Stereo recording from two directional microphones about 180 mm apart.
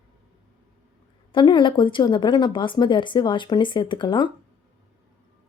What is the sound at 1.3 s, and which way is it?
Speech, 25° left (ahead or behind).